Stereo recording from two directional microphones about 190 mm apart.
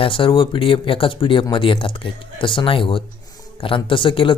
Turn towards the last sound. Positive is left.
turn(degrees=25)  # may be behind; listen again after turning